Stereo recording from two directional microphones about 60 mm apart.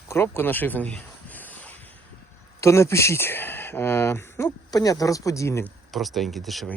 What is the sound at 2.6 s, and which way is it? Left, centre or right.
Speech, left.